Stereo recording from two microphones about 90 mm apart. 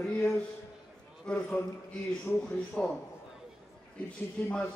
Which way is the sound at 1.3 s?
15° left (ahead or behind).